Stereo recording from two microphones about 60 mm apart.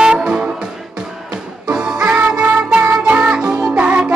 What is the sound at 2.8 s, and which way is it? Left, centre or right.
Music, right.